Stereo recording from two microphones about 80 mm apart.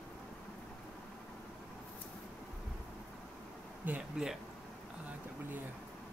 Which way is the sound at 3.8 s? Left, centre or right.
Right.